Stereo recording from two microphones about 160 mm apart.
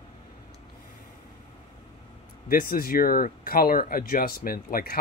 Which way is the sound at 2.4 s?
65° left (ahead or behind).